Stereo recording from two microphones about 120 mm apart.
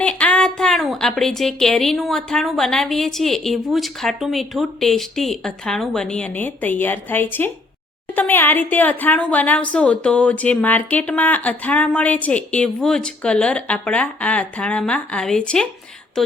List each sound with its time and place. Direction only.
0.0 s a woman's voice: 10° left (ahead or behind)